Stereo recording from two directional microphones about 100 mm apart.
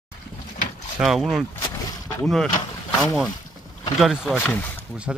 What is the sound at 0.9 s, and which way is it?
Speech, 5° right (ahead or behind).